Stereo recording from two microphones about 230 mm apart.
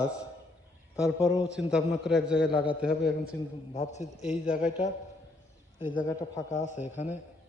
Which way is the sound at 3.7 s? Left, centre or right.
Left.